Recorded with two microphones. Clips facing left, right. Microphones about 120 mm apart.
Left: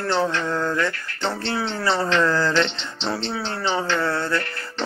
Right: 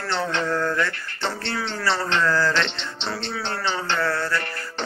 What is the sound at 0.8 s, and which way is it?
Speech, 20° left (ahead or behind).